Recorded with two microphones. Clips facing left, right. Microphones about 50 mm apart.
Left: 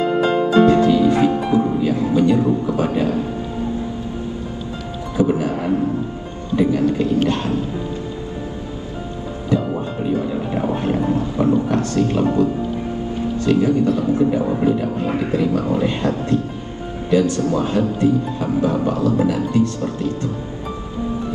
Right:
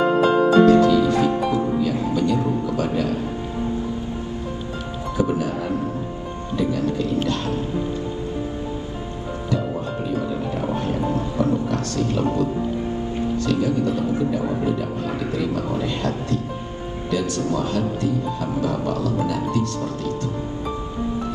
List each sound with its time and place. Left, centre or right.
0.7 s speech: left
5.1 s speech: left
6.5 s a man's voice: left
9.5 s music: left
10.5 s a man's voice: left
13.5 s a man's voice: left